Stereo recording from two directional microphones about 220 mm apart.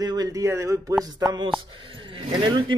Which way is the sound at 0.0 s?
15° right (ahead or behind).